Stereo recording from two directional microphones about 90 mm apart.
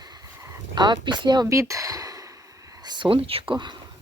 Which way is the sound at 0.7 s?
55° right (ahead or behind).